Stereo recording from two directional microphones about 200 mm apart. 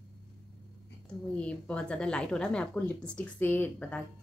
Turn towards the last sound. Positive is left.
turn(degrees=10)  # may be behind; listen again after turning